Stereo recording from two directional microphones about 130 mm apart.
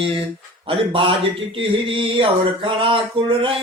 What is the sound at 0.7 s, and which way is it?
Speech, 40° right (ahead or behind).